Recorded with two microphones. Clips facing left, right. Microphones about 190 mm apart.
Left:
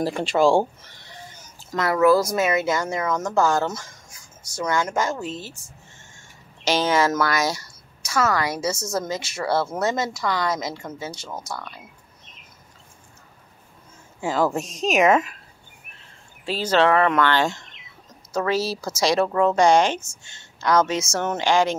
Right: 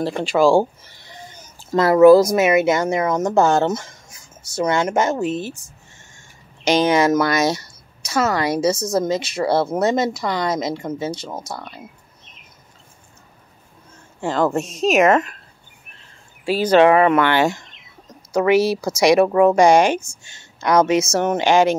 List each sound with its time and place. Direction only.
0.0 s a woman's voice: centre (ahead or behind)
1.7 s speech: 25° right (ahead or behind)
6.6 s speech: 15° right (ahead or behind)
14.2 s a woman's voice: 5° left (ahead or behind)
16.4 s a woman's voice: 10° right (ahead or behind)